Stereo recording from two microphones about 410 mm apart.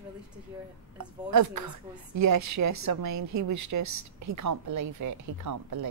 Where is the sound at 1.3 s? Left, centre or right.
Right.